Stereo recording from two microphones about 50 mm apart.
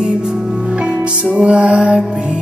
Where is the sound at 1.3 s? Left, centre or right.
Right.